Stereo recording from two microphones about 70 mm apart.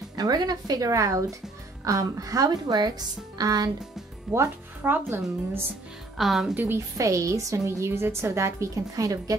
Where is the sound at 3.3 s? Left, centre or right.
Right.